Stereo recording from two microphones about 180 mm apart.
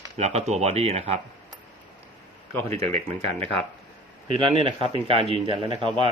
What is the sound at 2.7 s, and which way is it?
Speech, 35° right (ahead or behind).